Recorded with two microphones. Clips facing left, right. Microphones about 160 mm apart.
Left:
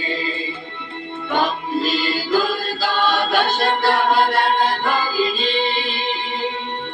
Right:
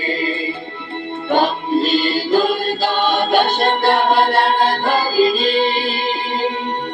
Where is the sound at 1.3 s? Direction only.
30° right (ahead or behind).